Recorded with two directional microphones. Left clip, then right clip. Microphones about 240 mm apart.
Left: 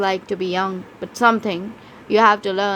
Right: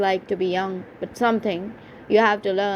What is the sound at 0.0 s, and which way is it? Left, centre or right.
Speech, centre.